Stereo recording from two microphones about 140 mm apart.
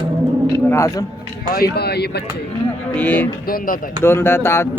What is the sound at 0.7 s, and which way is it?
Speech, 20° left (ahead or behind).